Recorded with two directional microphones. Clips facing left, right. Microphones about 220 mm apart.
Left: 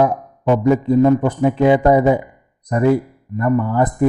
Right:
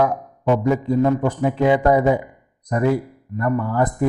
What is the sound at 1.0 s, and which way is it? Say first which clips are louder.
Speech: left 5 dB; 20° left (ahead or behind).